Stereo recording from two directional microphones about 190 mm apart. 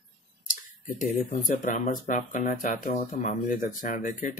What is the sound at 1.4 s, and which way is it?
Speech, 45° left (ahead or behind).